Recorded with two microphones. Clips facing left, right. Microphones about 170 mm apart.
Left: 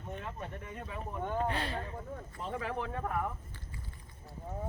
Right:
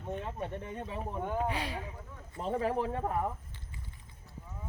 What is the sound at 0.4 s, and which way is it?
Speech, 30° right (ahead or behind).